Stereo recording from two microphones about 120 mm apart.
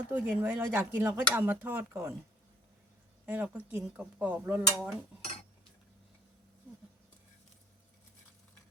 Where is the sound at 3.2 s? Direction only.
15° right (ahead or behind).